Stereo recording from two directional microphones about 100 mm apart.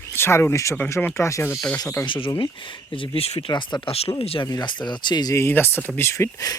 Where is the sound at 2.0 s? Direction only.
60° left (ahead or behind).